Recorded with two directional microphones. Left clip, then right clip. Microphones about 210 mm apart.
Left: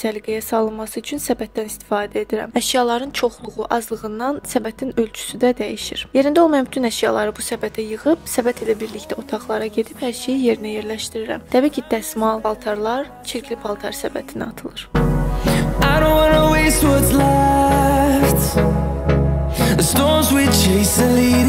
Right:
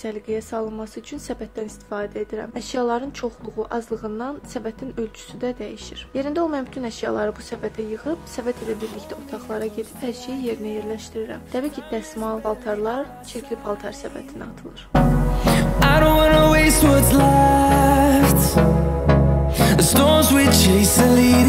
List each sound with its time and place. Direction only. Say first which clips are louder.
0.0 s a woman's voice: left 5 dB; 35° left (ahead or behind)
14.9 s music: right 2 dB; centre (ahead or behind)